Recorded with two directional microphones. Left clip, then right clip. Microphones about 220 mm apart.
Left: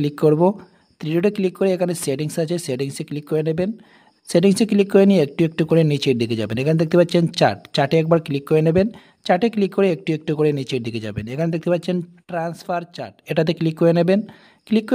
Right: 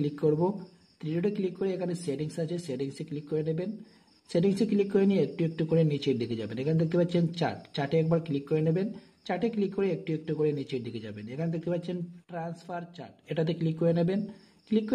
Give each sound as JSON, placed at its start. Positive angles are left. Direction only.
{"t": 0.0, "sound": "speech", "side_deg": 45}